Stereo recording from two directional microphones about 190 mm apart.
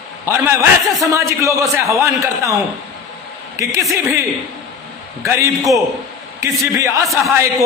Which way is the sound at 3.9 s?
15° right (ahead or behind).